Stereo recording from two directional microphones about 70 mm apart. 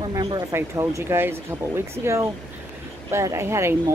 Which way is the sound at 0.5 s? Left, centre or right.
Right.